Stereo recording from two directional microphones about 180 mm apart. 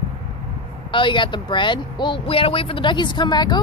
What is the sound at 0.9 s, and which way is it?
Speech, 25° left (ahead or behind).